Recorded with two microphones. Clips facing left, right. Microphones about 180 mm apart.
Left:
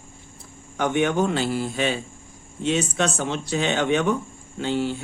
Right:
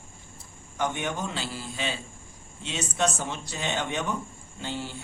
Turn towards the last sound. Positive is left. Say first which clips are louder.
# left 10 dB
turn(degrees=65)  # may be behind; listen again after turning